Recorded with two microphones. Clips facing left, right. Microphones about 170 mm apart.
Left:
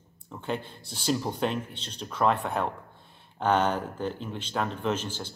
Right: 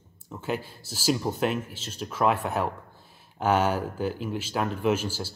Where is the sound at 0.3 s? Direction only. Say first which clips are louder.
Right 2 dB; 5° right (ahead or behind).